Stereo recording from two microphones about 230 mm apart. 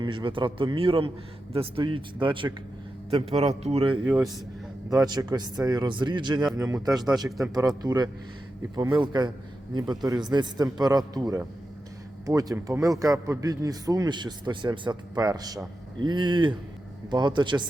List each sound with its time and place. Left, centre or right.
0.0 s a man's voice: right